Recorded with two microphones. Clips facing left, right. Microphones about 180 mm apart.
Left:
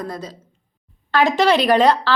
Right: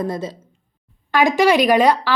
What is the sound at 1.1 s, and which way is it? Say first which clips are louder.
Speech: right 1 dB; 10° right (ahead or behind).